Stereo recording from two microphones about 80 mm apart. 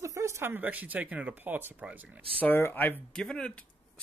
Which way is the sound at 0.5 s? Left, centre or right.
Right.